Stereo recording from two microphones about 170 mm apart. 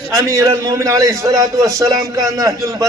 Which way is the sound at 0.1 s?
15° right (ahead or behind).